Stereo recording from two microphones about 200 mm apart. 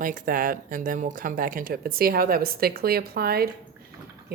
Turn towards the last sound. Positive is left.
turn(degrees=-50)  # may be behind; listen again after turning